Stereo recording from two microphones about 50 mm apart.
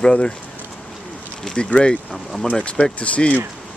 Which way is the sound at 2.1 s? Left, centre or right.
Centre.